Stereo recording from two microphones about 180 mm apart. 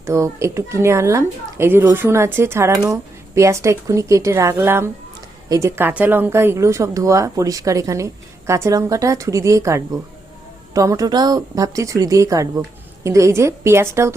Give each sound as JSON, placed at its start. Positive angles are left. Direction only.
{"t": 0.0, "sound": "speech", "side_deg": -15}